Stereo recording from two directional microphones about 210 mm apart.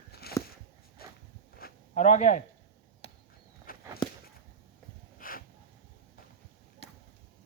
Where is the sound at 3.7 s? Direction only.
40° left (ahead or behind).